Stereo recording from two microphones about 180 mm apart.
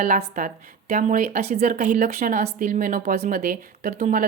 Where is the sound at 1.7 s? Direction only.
50° right (ahead or behind).